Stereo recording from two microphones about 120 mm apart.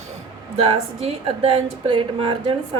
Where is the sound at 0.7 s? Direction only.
50° right (ahead or behind).